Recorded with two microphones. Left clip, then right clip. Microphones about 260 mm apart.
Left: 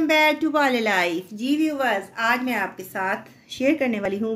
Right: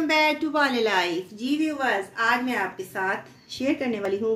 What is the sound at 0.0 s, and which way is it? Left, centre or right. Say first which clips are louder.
A woman's voice: left 3 dB; left.